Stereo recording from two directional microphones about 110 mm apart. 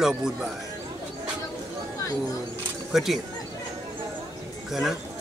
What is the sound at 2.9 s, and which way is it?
Speech, centre (ahead or behind).